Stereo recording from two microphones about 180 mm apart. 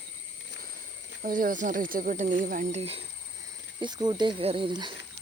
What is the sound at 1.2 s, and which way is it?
Speech, 50° right (ahead or behind).